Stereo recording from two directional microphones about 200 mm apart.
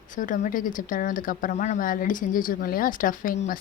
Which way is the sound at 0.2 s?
40° left (ahead or behind).